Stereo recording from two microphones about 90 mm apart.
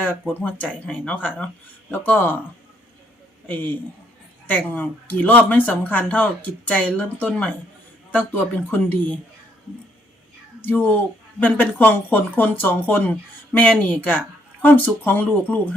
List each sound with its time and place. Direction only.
0.0 s speech: 20° left (ahead or behind)
3.4 s a man's voice: 20° left (ahead or behind)
10.7 s speech: 20° left (ahead or behind)